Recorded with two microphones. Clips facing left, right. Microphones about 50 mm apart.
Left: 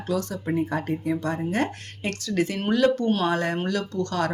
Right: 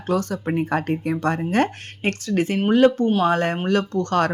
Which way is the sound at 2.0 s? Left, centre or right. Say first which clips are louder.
Right 4 dB; right.